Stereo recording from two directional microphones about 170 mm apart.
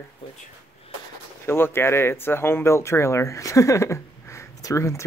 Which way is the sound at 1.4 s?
15° left (ahead or behind).